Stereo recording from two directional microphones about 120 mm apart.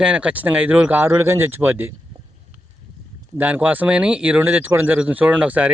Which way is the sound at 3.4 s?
15° right (ahead or behind).